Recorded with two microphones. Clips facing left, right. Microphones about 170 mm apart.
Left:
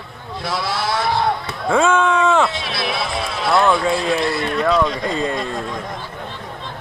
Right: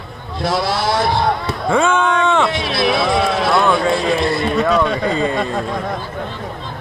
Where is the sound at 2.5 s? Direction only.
90° right.